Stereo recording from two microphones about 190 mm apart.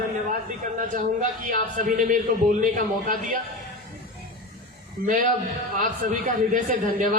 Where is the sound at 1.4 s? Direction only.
45° right (ahead or behind).